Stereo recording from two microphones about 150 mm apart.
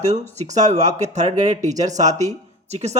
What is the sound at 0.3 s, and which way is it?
A man's voice, 50° right (ahead or behind).